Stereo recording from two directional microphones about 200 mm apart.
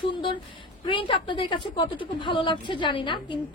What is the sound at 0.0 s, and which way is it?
A woman's voice, 25° left (ahead or behind).